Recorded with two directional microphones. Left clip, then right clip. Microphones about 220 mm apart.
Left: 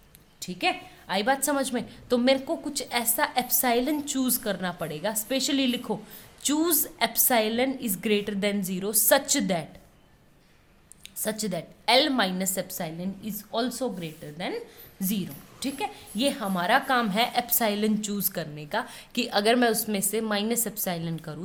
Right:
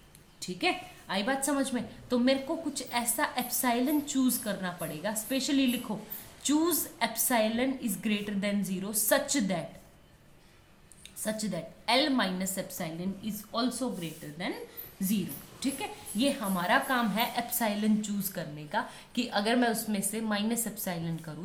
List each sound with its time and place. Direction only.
0.3 s a woman's voice: 45° left (ahead or behind)
11.2 s a woman's voice: 45° left (ahead or behind)
15.6 s a woman's voice: 45° left (ahead or behind)